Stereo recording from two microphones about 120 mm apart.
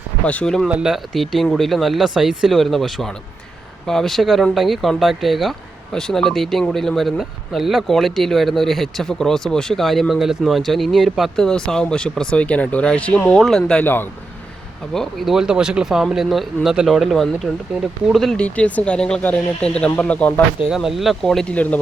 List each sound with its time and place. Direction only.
0.3 s speech: 10° left (ahead or behind)
0.7 s speech: 5° right (ahead or behind)
13.8 s speech: 15° left (ahead or behind)
14.9 s speech: centre (ahead or behind)
20.7 s speech: 5° right (ahead or behind)